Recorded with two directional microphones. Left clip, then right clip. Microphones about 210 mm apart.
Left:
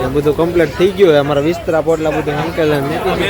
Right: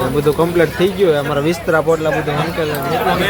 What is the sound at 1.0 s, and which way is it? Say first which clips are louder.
Speech: left 5 dB; 20° left (ahead or behind).